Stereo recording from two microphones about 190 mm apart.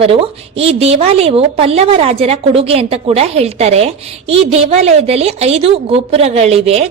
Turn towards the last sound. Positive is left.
turn(degrees=-30)  # may be behind; listen again after turning